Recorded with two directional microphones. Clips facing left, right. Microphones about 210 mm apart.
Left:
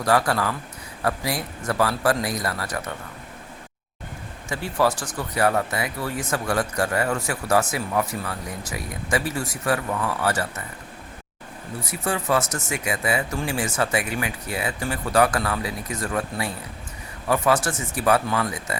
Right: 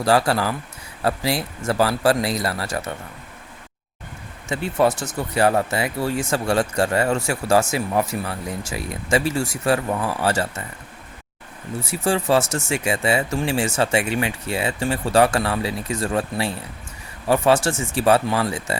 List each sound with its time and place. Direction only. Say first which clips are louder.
0.0 s speech: right 3 dB; 30° right (ahead or behind)
4.4 s speech: right 3 dB; 25° right (ahead or behind)
11.8 s speech: right 5 dB; 30° right (ahead or behind)